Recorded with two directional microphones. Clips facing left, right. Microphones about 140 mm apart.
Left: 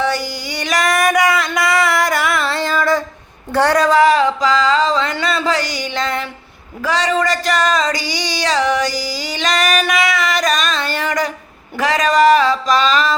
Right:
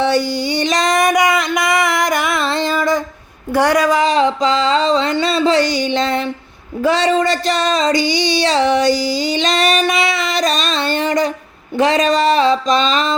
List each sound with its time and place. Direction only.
0.0 s female singing: 25° right (ahead or behind)
3.5 s music: 10° right (ahead or behind)
6.8 s female singing: 30° right (ahead or behind)
11.8 s music: 25° right (ahead or behind)